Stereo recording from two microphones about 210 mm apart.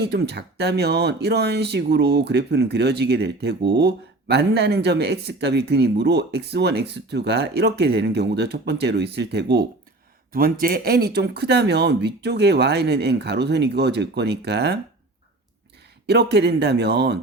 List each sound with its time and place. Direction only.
0.0 s speech: 50° right (ahead or behind)
16.0 s speech: 50° right (ahead or behind)